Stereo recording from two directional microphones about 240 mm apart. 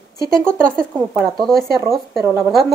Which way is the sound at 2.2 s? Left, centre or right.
Centre.